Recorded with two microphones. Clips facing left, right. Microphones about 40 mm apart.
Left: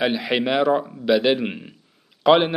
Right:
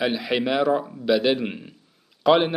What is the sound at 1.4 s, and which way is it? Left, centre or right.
A man's voice, centre.